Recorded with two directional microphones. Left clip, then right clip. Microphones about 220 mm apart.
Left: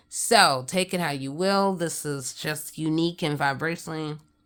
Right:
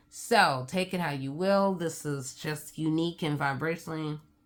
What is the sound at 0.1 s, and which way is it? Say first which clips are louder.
Speech: left 5 dB; 45° left (ahead or behind).